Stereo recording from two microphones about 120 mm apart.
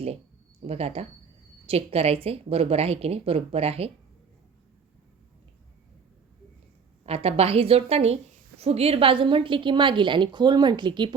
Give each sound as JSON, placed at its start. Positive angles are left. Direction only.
{"t": 0.7, "sound": "speech", "side_deg": -60}
{"t": 7.0, "sound": "a woman's voice", "side_deg": -55}